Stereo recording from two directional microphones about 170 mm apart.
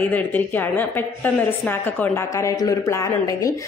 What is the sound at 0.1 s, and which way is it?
A woman's voice, 10° left (ahead or behind).